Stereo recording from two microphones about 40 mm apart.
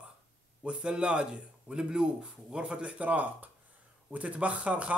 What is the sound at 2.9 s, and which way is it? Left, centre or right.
Speech, right.